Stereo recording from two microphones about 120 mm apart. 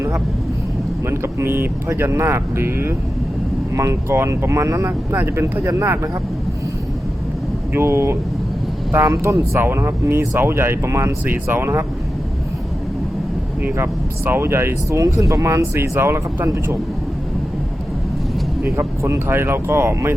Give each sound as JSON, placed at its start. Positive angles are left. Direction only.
{"t": 1.0, "sound": "speech", "side_deg": -20}
{"t": 7.7, "sound": "speech", "side_deg": -20}
{"t": 13.6, "sound": "speech", "side_deg": -20}
{"t": 18.6, "sound": "speech", "side_deg": -20}